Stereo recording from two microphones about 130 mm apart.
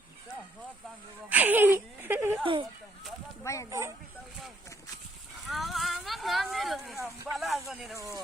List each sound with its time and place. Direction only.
1.3 s speech: 15° right (ahead or behind)
2.4 s speech: 40° right (ahead or behind)
3.4 s speech: 25° left (ahead or behind)
3.7 s speech: 20° right (ahead or behind)
5.5 s speech: centre (ahead or behind)